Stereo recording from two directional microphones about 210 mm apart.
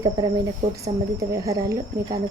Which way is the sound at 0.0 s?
20° right (ahead or behind).